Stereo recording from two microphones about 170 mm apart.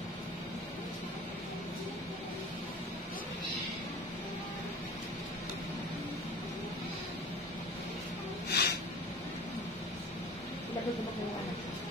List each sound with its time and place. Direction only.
8.5 s snort: 70° left (ahead or behind)